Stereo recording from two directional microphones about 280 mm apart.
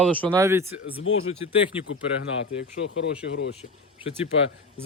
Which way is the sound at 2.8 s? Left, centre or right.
Left.